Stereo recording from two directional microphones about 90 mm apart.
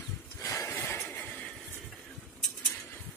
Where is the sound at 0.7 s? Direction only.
25° left (ahead or behind).